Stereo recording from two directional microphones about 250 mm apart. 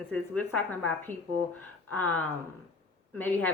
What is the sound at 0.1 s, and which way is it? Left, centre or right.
A woman's voice, centre.